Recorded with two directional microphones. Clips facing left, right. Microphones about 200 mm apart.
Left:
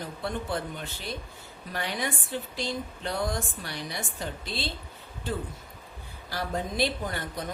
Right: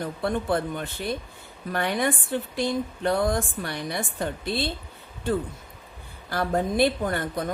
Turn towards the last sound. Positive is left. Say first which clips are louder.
# right 6 dB
turn(degrees=-55)  # may be behind; listen again after turning